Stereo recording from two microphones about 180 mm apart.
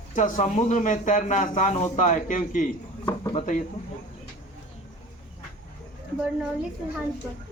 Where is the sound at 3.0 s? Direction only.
20° left (ahead or behind).